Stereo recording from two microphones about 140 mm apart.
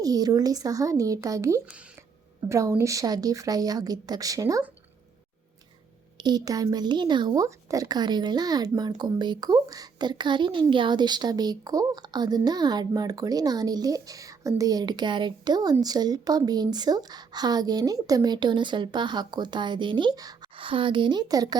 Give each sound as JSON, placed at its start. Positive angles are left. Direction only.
{"t": 0.0, "sound": "a woman's voice", "side_deg": -25}
{"t": 6.1, "sound": "a woman's voice", "side_deg": -30}